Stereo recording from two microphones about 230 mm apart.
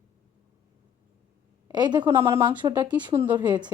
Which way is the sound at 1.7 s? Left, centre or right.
Centre.